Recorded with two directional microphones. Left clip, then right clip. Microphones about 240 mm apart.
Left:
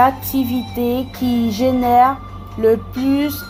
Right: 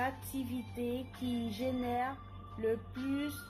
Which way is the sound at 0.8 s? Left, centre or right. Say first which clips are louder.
Left 19 dB; left.